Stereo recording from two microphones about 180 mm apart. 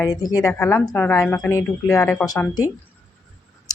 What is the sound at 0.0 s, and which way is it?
Speech, 20° left (ahead or behind).